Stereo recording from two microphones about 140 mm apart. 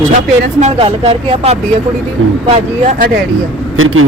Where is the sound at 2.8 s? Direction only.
55° right (ahead or behind).